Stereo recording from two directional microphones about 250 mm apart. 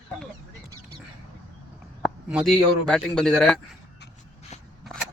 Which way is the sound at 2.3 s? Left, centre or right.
Centre.